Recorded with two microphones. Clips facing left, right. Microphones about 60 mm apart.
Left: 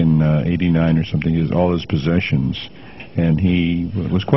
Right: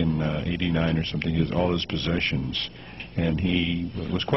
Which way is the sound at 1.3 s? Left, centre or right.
Centre.